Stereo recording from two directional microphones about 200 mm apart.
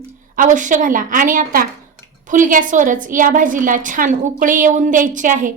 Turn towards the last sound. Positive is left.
turn(degrees=-40)  # may be behind; listen again after turning